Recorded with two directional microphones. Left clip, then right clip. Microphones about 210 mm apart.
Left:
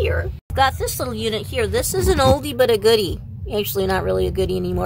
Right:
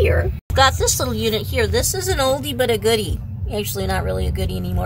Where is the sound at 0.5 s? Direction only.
5° left (ahead or behind); by 4.8 s 30° left (ahead or behind).